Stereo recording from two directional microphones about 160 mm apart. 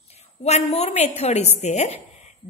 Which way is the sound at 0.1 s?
40° left (ahead or behind).